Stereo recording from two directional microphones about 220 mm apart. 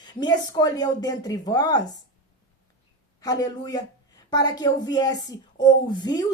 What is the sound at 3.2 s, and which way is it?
A woman's voice, 15° left (ahead or behind).